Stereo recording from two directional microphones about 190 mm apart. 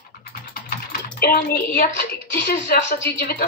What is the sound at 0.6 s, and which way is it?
Typing, 55° left (ahead or behind).